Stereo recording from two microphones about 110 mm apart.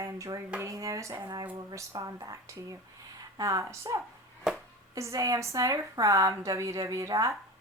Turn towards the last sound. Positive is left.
turn(degrees=-30)  # may be behind; listen again after turning